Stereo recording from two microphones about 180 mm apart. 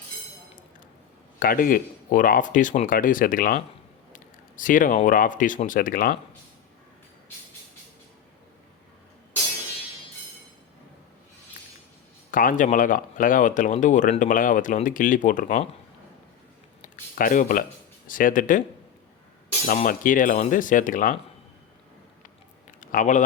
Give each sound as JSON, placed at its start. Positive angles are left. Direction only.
{"t": 1.4, "sound": "speech", "side_deg": 50}
{"t": 12.3, "sound": "speech", "side_deg": 50}
{"t": 16.8, "sound": "a sound", "side_deg": 50}
{"t": 18.1, "sound": "speech", "side_deg": 50}
{"t": 19.6, "sound": "speech", "side_deg": 50}
{"t": 22.8, "sound": "speech", "side_deg": 45}